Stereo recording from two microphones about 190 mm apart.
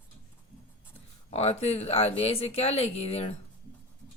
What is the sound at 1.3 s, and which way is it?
Speech, 35° left (ahead or behind).